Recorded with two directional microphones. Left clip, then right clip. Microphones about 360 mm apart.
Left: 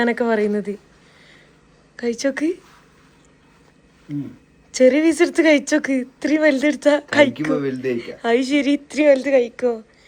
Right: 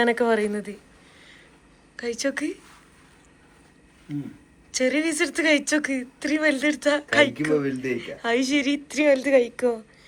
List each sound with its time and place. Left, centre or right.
0.0 s speech: centre
2.0 s speech: centre
4.1 s speech: centre